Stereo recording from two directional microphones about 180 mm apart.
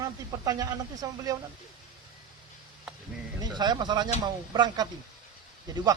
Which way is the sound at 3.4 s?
25° right (ahead or behind).